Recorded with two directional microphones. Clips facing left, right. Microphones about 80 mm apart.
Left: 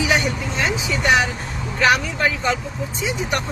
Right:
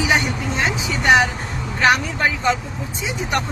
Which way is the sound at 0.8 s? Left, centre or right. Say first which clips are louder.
Right 3 dB; right.